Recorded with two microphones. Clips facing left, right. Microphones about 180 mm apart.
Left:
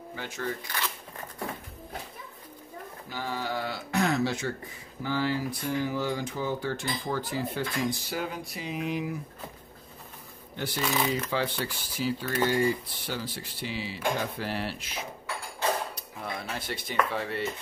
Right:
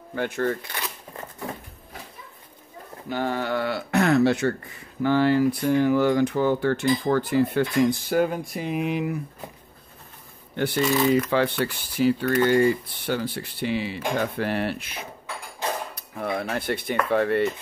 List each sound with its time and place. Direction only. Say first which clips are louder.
0.1 s speech: right 10 dB; 60° right (ahead or behind)
3.1 s speech: right 8 dB; 60° right (ahead or behind)
10.5 s speech: right 8 dB; 60° right (ahead or behind)